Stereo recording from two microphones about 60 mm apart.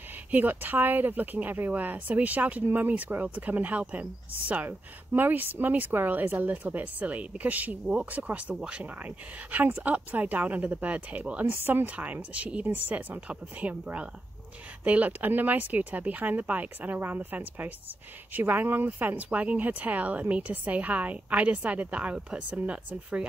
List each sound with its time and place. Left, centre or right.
0.3 s speech: right